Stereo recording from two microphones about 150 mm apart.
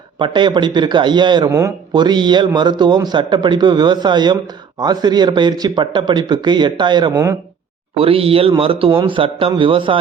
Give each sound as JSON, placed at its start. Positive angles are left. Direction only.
{"t": 0.2, "sound": "a man's voice", "side_deg": -30}
{"t": 1.5, "sound": "a man's voice", "side_deg": -20}
{"t": 1.9, "sound": "a man's voice", "side_deg": -30}
{"t": 7.1, "sound": "speech", "side_deg": -15}
{"t": 7.9, "sound": "a man's voice", "side_deg": -40}